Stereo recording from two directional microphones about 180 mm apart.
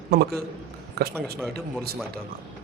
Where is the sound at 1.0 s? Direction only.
60° right (ahead or behind).